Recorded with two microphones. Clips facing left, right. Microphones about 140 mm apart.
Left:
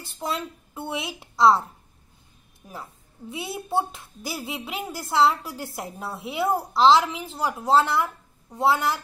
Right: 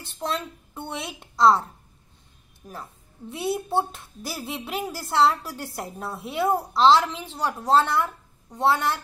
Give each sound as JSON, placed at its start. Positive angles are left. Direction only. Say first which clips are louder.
{"t": 0.0, "sound": "a child's voice", "louder": "even", "side_deg": 0}
{"t": 2.7, "sound": "a child's voice", "louder": "even", "side_deg": 0}